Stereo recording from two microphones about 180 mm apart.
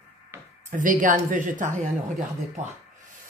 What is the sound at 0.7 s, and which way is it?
Speech, 45° right (ahead or behind).